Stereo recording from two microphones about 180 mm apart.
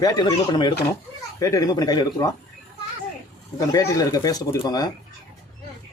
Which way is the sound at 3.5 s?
20° left (ahead or behind).